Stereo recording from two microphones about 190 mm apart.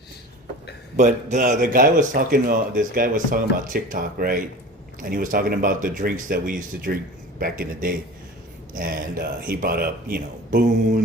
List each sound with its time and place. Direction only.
0.9 s speech: 40° right (ahead or behind)